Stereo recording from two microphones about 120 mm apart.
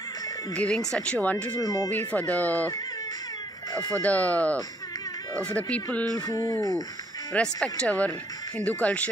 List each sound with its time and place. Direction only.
0.6 s speech: 5° left (ahead or behind)
1.6 s speech: 30° left (ahead or behind)
1.9 s speech: 15° left (ahead or behind)
4.0 s speech: 10° left (ahead or behind)
6.1 s speech: 30° left (ahead or behind)
7.3 s speech: 10° left (ahead or behind)